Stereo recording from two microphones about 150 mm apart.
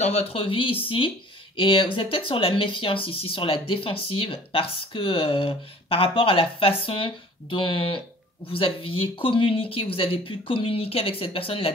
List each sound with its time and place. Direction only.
0.0 s speech: 45° left (ahead or behind)